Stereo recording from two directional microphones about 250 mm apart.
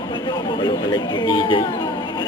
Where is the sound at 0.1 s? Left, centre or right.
Centre.